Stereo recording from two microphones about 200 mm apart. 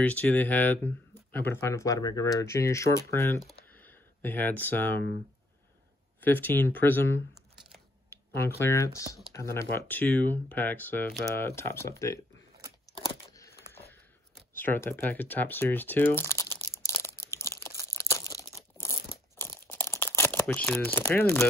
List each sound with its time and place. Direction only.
0.0 s speech: 5° left (ahead or behind)
6.2 s speech: 10° left (ahead or behind)
8.5 s speech: 15° left (ahead or behind)
13.0 s a sound: 15° left (ahead or behind)
14.6 s speech: 10° left (ahead or behind)
16.8 s crumpling: 15° left (ahead or behind)
17.4 s tearing: 15° left (ahead or behind)
19.4 s crumpling: 10° left (ahead or behind)